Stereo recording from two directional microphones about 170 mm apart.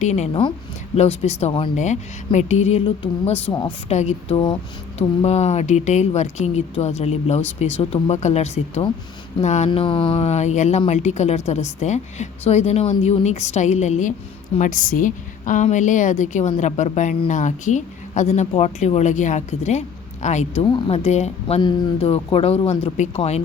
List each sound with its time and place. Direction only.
0.0 s a woman's voice: 40° left (ahead or behind)
9.6 s a woman's voice: 30° left (ahead or behind)
20.6 s speech: 30° left (ahead or behind)